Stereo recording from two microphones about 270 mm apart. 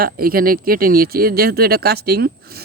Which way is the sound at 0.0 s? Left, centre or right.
Right.